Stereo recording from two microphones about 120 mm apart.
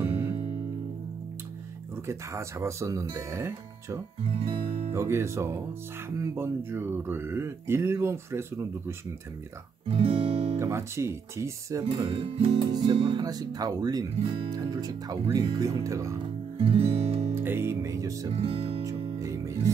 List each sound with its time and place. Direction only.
0.0 s music: 20° right (ahead or behind)
2.0 s speech: 25° right (ahead or behind)
4.2 s speech: 55° right (ahead or behind)
4.9 s speech: 20° right (ahead or behind)
9.8 s guitar: 50° right (ahead or behind)
10.6 s speech: 20° right (ahead or behind)
11.8 s speech: 45° right (ahead or behind)
13.1 s speech: 35° right (ahead or behind)
16.5 s music: 55° right (ahead or behind)
17.3 s music: 20° right (ahead or behind)
18.3 s speech: 55° right (ahead or behind)
19.1 s music: 25° right (ahead or behind)